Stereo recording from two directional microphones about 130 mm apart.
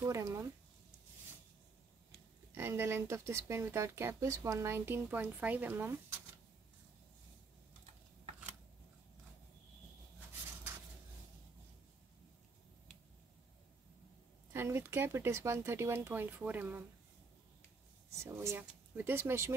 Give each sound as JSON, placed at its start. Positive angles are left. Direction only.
{"t": 0.0, "sound": "speech", "side_deg": -25}
{"t": 2.5, "sound": "speech", "side_deg": -20}
{"t": 14.5, "sound": "speech", "side_deg": -20}
{"t": 18.1, "sound": "speech", "side_deg": -20}